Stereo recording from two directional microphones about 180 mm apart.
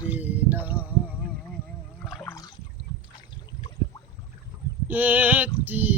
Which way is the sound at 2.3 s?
20° left (ahead or behind).